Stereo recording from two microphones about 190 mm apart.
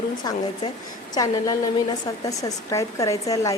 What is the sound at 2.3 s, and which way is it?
Speech, 20° left (ahead or behind).